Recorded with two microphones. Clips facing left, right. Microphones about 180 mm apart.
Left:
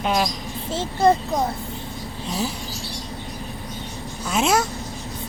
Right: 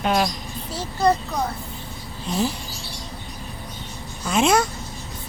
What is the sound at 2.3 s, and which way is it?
Speech, centre (ahead or behind).